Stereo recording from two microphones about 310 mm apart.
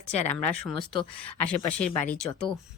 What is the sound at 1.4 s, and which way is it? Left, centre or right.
A woman's voice, centre.